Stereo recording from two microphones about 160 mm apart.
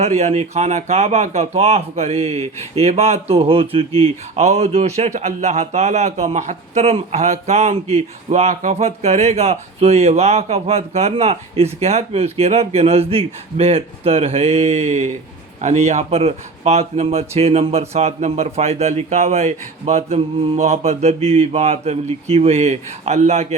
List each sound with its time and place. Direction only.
0.0 s speech: 45° right (ahead or behind)